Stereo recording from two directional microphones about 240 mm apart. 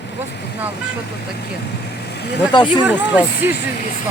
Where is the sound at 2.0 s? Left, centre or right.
Left.